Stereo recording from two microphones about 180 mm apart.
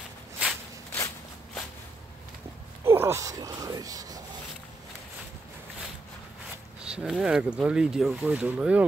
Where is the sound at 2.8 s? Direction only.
15° right (ahead or behind).